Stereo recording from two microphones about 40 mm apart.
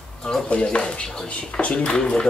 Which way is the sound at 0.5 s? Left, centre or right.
Left.